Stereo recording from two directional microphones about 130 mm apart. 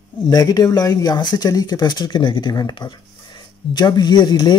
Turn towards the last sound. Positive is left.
turn(degrees=35)  # may be behind; listen again after turning